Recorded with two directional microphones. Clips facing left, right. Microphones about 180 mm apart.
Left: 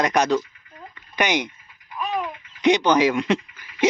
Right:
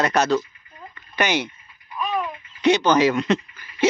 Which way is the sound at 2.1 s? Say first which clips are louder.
Right 1 dB; 15° left (ahead or behind).